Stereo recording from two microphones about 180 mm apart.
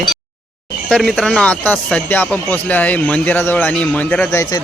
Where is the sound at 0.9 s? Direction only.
5° left (ahead or behind).